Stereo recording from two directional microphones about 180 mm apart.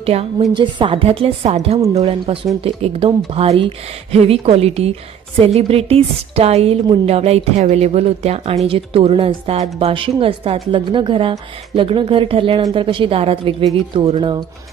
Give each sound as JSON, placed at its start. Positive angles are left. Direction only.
{"t": 0.0, "sound": "a woman's voice", "side_deg": -35}